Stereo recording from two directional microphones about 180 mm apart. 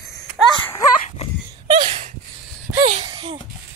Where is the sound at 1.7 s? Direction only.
30° right (ahead or behind).